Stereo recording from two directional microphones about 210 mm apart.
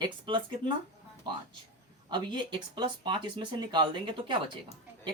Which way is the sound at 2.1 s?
20° right (ahead or behind).